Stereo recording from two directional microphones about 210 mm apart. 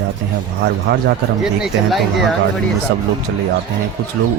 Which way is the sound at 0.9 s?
50° right (ahead or behind).